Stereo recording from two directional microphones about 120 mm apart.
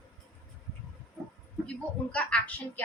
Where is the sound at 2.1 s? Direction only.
10° left (ahead or behind).